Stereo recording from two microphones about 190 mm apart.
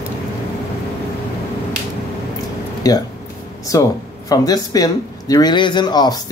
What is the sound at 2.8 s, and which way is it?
A man's voice, 20° left (ahead or behind).